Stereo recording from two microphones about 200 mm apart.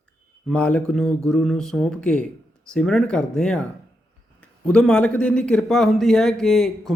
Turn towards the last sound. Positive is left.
turn(degrees=0)  # may be behind; listen again after turning